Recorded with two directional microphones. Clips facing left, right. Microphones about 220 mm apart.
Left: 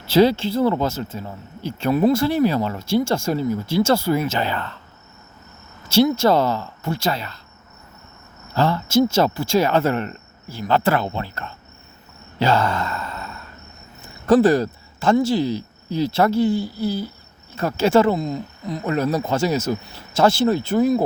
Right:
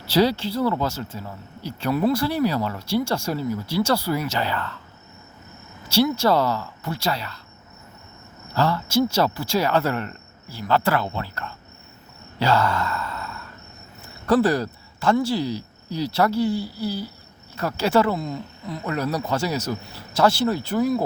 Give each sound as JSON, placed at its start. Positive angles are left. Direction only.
{"t": 0.0, "sound": "speech", "side_deg": 25}
{"t": 6.2, "sound": "speech", "side_deg": 20}
{"t": 8.5, "sound": "speech", "side_deg": 20}
{"t": 12.4, "sound": "sigh", "side_deg": 20}
{"t": 14.3, "sound": "speech", "side_deg": 20}